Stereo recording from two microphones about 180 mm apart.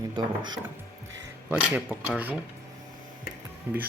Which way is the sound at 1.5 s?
10° right (ahead or behind).